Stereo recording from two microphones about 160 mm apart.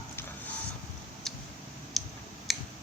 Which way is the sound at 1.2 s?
5° left (ahead or behind).